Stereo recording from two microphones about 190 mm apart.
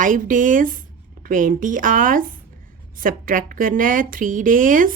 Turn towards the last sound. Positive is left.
turn(degrees=-45)  # may be behind; listen again after turning